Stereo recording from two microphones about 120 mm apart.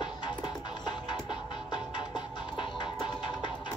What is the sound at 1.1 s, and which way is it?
Music, 40° left (ahead or behind).